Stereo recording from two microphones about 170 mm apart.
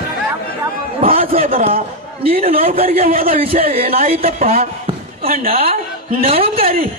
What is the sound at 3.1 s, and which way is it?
Speech, 60° right (ahead or behind).